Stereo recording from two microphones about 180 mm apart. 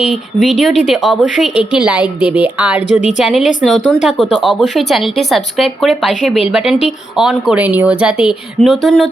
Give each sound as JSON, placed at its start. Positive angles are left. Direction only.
{"t": 0.4, "sound": "speech", "side_deg": 0}